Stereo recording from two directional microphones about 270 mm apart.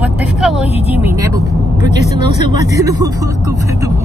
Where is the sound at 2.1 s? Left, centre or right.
Left.